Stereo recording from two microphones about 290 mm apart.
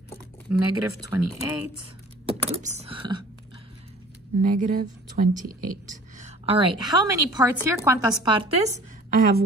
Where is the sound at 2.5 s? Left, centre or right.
Right.